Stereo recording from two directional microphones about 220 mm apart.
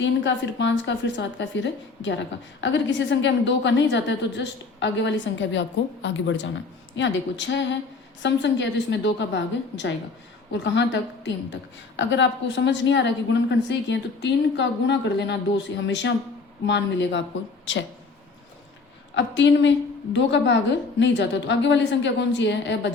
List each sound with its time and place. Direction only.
0.0 s a woman's voice: 55° left (ahead or behind)
19.1 s a woman's voice: 55° left (ahead or behind)